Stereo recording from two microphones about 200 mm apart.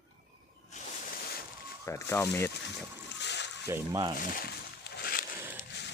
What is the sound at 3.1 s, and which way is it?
Splash, 60° left (ahead or behind).